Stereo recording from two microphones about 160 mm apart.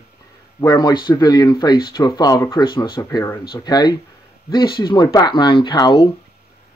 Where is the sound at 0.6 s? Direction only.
25° left (ahead or behind).